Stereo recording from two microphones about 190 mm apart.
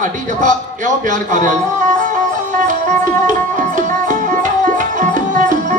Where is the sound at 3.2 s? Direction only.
40° right (ahead or behind).